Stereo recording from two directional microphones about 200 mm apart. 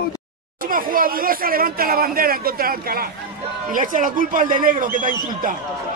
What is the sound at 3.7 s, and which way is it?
Speech, 40° right (ahead or behind).